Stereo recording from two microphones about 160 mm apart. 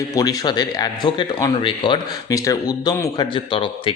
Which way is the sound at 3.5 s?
35° left (ahead or behind).